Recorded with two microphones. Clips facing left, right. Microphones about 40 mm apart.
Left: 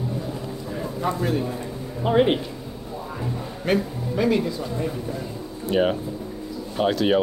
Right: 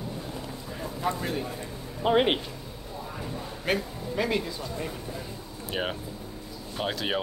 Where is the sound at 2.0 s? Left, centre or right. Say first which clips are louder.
Left 4 dB; right.